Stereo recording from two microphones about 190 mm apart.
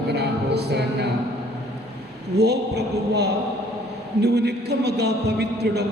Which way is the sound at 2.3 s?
60° right (ahead or behind).